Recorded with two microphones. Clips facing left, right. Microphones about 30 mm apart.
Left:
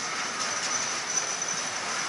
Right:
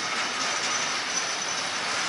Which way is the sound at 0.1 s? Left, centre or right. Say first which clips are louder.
Right 3 dB; right.